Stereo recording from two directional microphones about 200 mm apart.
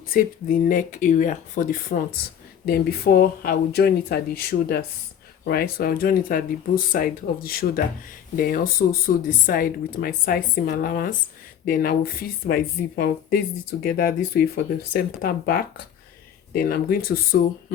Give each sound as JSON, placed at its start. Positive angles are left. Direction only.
{"t": 0.1, "sound": "speech", "side_deg": 45}